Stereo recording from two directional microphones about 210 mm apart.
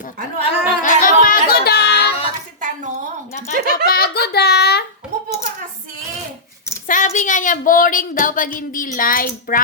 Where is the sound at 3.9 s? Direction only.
50° left (ahead or behind).